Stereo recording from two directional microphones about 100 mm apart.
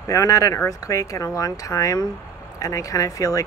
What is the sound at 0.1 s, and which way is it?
Speech, 35° left (ahead or behind).